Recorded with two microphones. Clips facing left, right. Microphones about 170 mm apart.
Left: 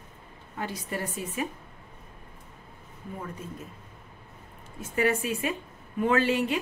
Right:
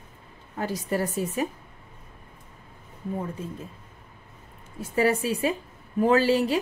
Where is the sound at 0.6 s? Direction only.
40° right (ahead or behind).